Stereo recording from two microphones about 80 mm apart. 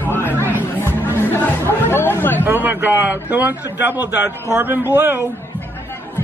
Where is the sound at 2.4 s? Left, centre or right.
Right.